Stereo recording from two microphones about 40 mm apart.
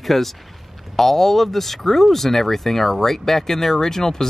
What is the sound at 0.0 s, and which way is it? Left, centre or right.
Speech, centre.